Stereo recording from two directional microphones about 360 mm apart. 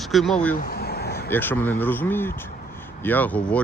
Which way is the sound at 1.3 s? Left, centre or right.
Centre.